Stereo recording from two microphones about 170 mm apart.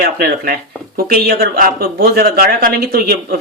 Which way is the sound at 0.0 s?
60° right (ahead or behind).